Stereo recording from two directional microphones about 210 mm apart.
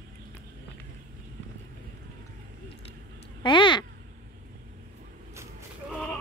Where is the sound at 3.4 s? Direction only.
20° left (ahead or behind).